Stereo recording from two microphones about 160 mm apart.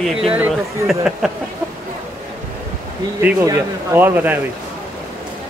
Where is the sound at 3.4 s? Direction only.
15° right (ahead or behind).